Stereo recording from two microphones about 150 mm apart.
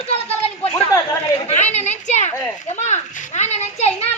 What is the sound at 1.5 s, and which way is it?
Speech, 50° left (ahead or behind).